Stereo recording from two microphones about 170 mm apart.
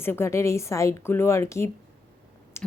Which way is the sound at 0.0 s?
15° left (ahead or behind).